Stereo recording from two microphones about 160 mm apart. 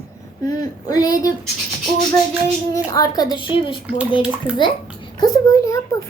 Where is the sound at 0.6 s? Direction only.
25° left (ahead or behind).